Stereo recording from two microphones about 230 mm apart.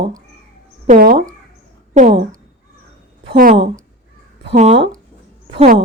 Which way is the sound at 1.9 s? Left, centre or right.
Right.